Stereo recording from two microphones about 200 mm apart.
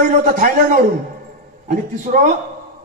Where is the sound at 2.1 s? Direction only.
40° right (ahead or behind).